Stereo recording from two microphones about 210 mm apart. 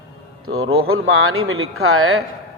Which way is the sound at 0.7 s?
75° right (ahead or behind).